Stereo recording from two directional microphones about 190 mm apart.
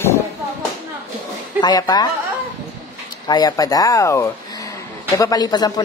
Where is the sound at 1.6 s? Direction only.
20° left (ahead or behind).